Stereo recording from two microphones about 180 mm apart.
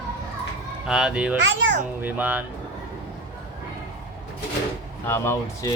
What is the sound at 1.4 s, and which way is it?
Speech, 90° right.